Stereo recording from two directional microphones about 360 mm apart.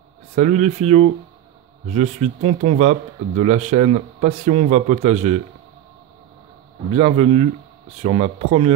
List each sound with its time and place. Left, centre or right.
0.4 s speech: centre
6.9 s speech: centre